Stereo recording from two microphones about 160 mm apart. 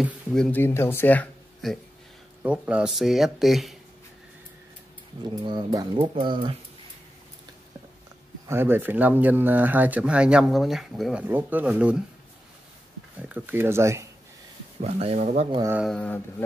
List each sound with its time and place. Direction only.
0.0 s speech: 5° left (ahead or behind)
2.4 s speech: 5° right (ahead or behind)
5.3 s speech: 30° right (ahead or behind)
8.5 s speech: 15° right (ahead or behind)
13.3 s speech: 15° right (ahead or behind)
14.8 s speech: 40° right (ahead or behind)
15.8 s speech: 5° left (ahead or behind)